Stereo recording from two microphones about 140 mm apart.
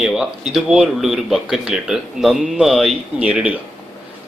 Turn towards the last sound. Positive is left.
turn(degrees=-10)  # may be behind; listen again after turning